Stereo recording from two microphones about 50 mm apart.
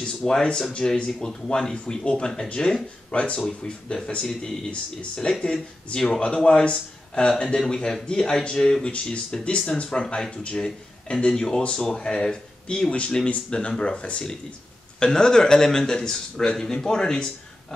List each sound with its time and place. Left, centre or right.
0.0 s speech: centre
11.9 s speech: centre